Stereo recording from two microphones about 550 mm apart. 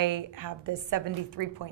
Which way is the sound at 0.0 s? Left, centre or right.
Right.